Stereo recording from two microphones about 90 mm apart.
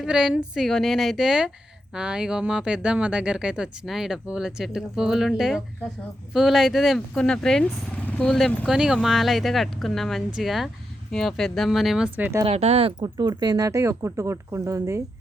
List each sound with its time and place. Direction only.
0.0 s speech: 5° right (ahead or behind)
7.1 s speech: 10° left (ahead or behind)
12.1 s speech: 20° right (ahead or behind)
12.5 s speech: 90° right
13.0 s speech: 55° right (ahead or behind); by 15.0 s 35° right (ahead or behind)